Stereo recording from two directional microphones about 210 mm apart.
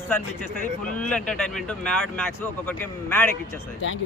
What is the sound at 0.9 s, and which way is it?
Speech, 5° left (ahead or behind).